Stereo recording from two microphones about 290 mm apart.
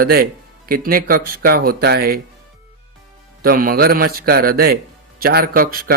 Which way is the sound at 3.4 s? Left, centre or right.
Right.